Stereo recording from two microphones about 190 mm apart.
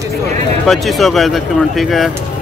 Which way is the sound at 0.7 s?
Centre (ahead or behind).